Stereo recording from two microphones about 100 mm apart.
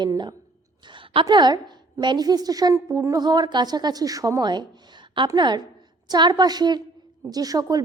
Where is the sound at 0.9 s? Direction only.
55° right (ahead or behind).